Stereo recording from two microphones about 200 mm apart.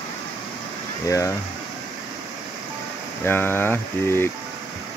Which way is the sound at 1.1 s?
15° left (ahead or behind).